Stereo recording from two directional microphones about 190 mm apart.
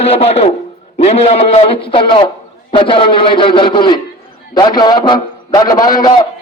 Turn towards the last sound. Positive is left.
turn(degrees=20)  # may be behind; listen again after turning